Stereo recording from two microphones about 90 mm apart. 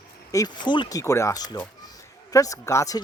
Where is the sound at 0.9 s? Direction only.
35° left (ahead or behind).